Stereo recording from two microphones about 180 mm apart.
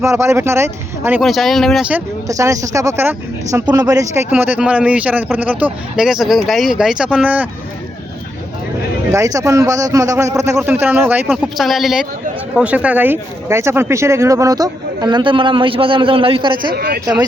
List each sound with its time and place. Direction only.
0.0 s speech: 15° right (ahead or behind)
1.2 s speech: centre (ahead or behind)
9.1 s speech: 20° right (ahead or behind)
16.7 s speech: 60° right (ahead or behind)